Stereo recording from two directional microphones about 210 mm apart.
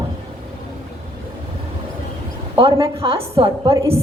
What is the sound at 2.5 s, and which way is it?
A woman's voice, 25° right (ahead or behind).